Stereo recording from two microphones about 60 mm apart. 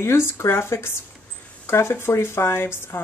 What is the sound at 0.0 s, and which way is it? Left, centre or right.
Speech, left.